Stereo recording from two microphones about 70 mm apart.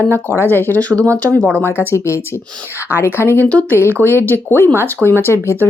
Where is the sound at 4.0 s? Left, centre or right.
Left.